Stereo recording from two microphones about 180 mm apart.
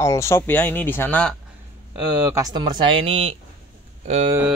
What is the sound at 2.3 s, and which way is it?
Speech, 20° right (ahead or behind).